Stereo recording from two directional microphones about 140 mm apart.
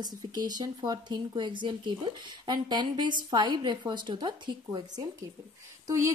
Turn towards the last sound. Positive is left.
turn(degrees=-20)  # may be behind; listen again after turning